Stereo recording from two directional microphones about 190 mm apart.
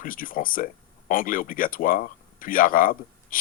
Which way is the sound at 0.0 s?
45° left (ahead or behind).